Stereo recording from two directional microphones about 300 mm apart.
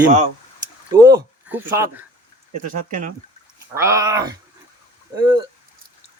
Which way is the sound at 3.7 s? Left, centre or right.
Centre.